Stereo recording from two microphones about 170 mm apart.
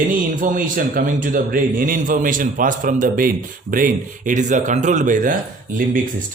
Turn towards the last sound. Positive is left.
turn(degrees=-50)  # may be behind; listen again after turning